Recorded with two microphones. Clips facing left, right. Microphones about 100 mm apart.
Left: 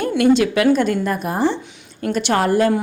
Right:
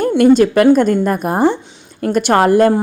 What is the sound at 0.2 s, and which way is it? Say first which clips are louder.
A woman's voice: right 5 dB; 45° right (ahead or behind).